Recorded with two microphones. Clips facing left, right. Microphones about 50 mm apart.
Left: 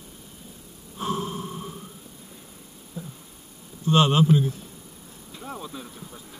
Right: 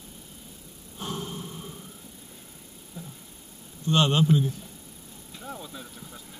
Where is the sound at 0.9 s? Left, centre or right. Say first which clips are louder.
Left 6 dB; left.